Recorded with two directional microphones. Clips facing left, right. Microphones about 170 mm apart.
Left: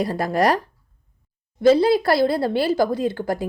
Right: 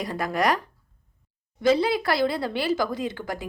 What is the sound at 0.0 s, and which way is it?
Speech, 35° left (ahead or behind).